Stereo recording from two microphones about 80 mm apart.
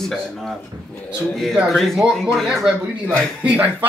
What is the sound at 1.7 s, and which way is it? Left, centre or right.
Speech, centre.